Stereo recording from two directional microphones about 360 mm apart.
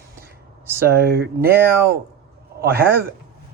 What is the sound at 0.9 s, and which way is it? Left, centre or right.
Speech, right.